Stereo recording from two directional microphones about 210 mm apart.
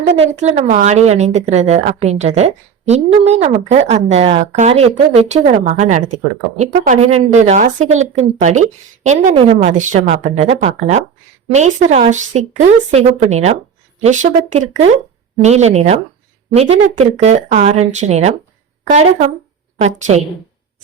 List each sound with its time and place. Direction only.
0.2 s a woman's voice: 30° right (ahead or behind)